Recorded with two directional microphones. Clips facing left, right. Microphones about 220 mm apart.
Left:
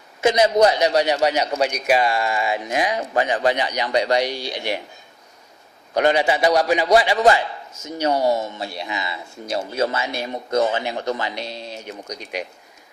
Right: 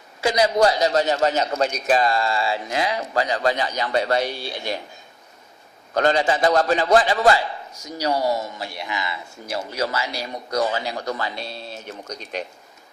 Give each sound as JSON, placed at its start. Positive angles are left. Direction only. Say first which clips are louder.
{"t": 0.2, "sound": "a man's voice", "louder": "left 3 dB", "side_deg": 25}
{"t": 5.9, "sound": "a man's voice", "louder": "left 1 dB", "side_deg": 15}